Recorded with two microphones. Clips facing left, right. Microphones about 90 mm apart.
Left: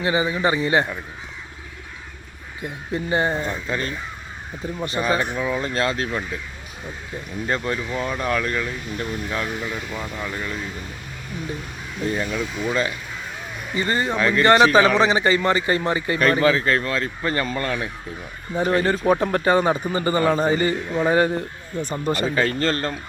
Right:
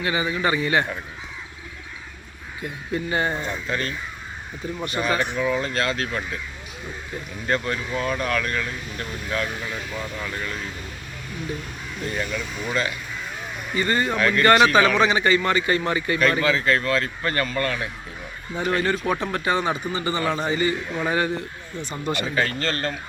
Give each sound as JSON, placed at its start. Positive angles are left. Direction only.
{"t": 0.0, "sound": "a man's voice", "side_deg": 30}
{"t": 2.9, "sound": "a man's voice", "side_deg": 30}
{"t": 7.4, "sound": "a man's voice", "side_deg": 20}
{"t": 12.0, "sound": "a man's voice", "side_deg": 30}
{"t": 18.5, "sound": "speech", "side_deg": 35}